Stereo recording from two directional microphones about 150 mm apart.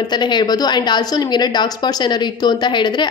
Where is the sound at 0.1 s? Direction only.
30° left (ahead or behind).